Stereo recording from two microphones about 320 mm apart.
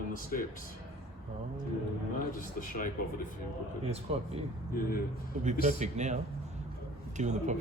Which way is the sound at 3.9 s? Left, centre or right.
Centre.